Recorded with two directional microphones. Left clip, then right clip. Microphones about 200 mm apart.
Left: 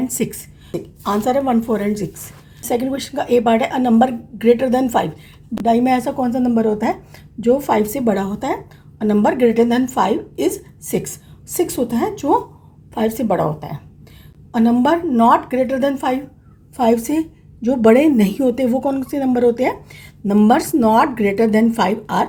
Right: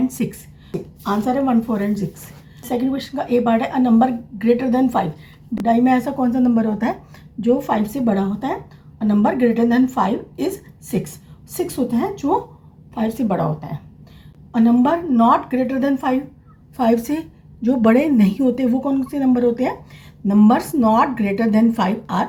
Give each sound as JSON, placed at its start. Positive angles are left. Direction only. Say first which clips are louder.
{"t": 0.1, "sound": "a woman's voice", "louder": "left 4 dB", "side_deg": 35}